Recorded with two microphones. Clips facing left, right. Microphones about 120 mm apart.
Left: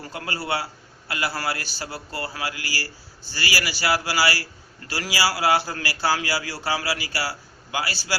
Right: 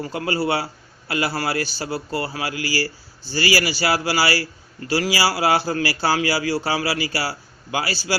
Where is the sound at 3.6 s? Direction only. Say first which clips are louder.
Right 3 dB; 25° right (ahead or behind).